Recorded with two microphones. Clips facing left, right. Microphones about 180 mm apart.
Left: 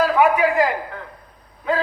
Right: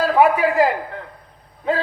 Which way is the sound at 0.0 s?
35° right (ahead or behind).